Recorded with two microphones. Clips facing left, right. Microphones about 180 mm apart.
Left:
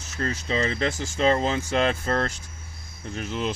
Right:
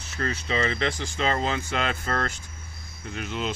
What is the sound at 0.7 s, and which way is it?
Speech, 40° left (ahead or behind).